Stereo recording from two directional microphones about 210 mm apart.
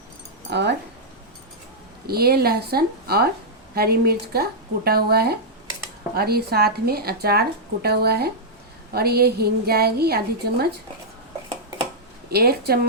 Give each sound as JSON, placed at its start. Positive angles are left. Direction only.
{"t": 0.5, "sound": "speech", "side_deg": -55}
{"t": 2.0, "sound": "speech", "side_deg": -45}
{"t": 12.3, "sound": "speech", "side_deg": -50}